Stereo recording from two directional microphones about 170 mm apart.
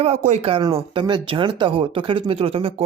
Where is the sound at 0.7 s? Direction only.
30° right (ahead or behind).